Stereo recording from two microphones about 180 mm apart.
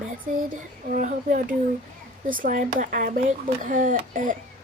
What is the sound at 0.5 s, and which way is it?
Speech, 45° right (ahead or behind).